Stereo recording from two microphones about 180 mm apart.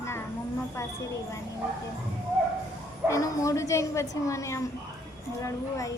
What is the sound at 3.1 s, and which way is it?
Speech, 20° left (ahead or behind).